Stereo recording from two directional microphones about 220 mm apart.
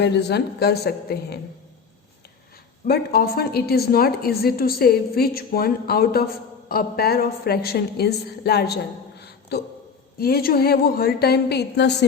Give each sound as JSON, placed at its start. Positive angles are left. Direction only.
{"t": 0.0, "sound": "a woman's voice", "side_deg": 50}
{"t": 2.8, "sound": "a woman's voice", "side_deg": 45}